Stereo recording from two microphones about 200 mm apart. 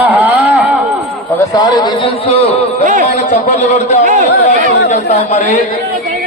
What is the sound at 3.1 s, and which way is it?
A man's voice, 35° left (ahead or behind).